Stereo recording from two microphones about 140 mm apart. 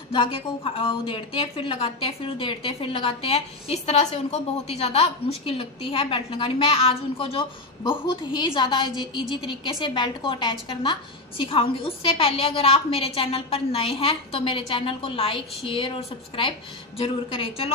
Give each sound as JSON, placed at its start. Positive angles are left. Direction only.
{"t": 0.1, "sound": "a woman's voice", "side_deg": 40}